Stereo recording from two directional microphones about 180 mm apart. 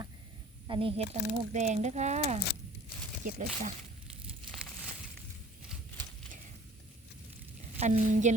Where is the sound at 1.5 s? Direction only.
40° right (ahead or behind).